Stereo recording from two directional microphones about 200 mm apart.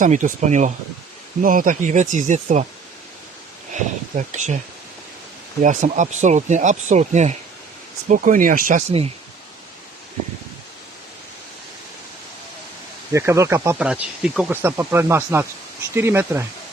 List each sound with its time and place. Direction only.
0.0 s speech: 40° right (ahead or behind)
4.1 s speech: 35° right (ahead or behind)
5.6 s speech: 40° right (ahead or behind)
13.1 s speech: 15° right (ahead or behind)